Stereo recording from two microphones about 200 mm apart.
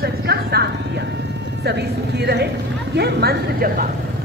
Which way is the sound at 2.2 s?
55° right (ahead or behind).